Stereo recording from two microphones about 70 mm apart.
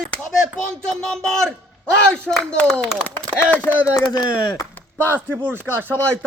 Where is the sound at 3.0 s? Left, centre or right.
Left.